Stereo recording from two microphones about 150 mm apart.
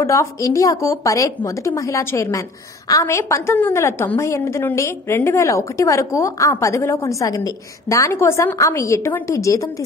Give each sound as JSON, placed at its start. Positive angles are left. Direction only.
{"t": 0.0, "sound": "a woman's voice", "side_deg": 20}